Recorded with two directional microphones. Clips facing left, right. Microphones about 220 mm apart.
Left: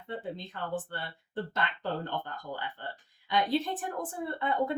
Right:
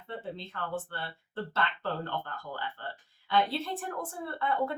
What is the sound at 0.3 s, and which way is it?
Speech, 15° left (ahead or behind).